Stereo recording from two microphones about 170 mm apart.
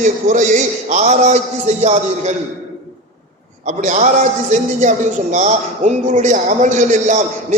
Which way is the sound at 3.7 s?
45° right (ahead or behind).